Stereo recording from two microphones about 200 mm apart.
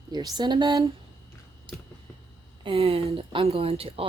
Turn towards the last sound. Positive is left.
turn(degrees=-30)  # may be behind; listen again after turning